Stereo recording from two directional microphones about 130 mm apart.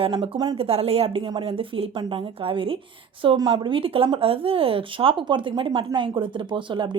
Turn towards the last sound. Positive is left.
turn(degrees=-40)  # may be behind; listen again after turning